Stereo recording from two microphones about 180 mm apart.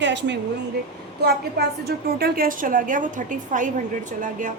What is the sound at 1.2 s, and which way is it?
A woman's voice, 60° right (ahead or behind).